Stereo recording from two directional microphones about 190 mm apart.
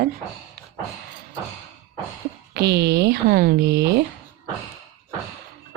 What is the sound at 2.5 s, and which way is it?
Speech, 60° right (ahead or behind).